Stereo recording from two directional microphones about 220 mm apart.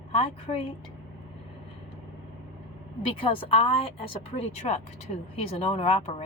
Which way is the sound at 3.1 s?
25° left (ahead or behind).